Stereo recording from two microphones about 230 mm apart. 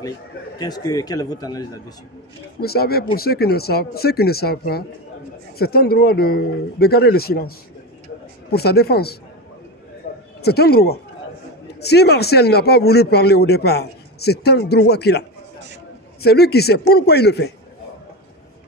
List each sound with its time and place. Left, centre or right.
0.6 s speech: centre
2.6 s a man's voice: left
10.1 s a sound: left
10.4 s a man's voice: left